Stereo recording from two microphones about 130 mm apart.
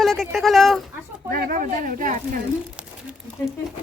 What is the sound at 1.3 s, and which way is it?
Speech, 90° right.